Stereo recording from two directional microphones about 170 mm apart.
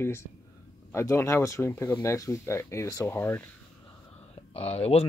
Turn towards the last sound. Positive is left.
turn(degrees=35)  # may be behind; listen again after turning